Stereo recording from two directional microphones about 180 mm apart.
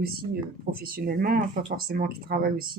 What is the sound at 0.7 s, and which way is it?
Speech, 55° right (ahead or behind).